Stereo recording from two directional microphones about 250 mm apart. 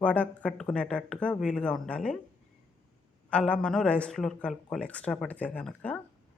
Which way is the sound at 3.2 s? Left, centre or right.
Centre.